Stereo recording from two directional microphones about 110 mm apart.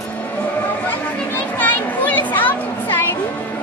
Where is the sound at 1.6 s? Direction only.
15° left (ahead or behind).